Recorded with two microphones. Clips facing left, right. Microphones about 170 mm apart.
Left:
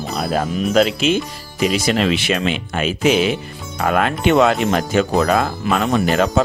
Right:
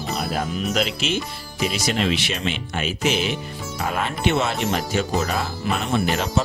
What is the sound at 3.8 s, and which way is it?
Speech, 70° left (ahead or behind).